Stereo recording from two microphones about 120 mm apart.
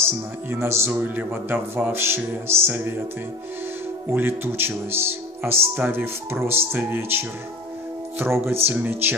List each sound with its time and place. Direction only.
0.0 s speech: 20° right (ahead or behind)
4.1 s speech: 20° right (ahead or behind)